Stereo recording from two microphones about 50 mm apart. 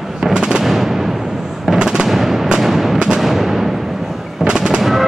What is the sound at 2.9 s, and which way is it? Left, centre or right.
Music, centre.